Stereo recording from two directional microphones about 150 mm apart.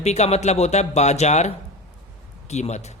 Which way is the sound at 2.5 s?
50° left (ahead or behind).